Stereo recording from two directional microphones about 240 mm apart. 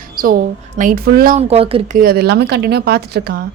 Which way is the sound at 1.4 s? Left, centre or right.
Right.